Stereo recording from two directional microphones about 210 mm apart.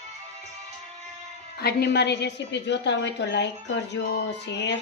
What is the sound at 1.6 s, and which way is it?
A woman's voice, 50° left (ahead or behind).